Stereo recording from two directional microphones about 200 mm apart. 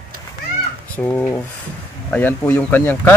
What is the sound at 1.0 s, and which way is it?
Speech, 10° left (ahead or behind).